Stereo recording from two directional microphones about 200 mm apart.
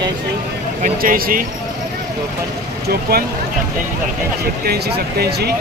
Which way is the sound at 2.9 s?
50° right (ahead or behind).